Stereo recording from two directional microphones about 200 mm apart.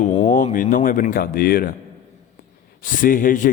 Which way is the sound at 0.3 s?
40° left (ahead or behind).